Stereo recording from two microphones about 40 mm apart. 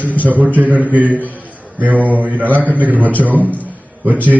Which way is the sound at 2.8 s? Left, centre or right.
Right.